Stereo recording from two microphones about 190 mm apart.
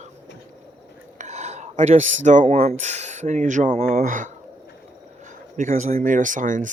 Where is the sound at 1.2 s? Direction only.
35° right (ahead or behind).